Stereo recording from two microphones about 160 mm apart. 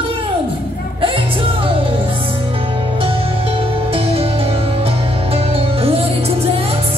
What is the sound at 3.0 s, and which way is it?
Music, 35° right (ahead or behind).